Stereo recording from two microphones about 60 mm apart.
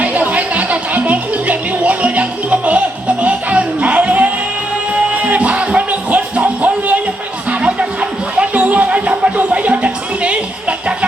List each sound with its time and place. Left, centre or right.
0.0 s music: right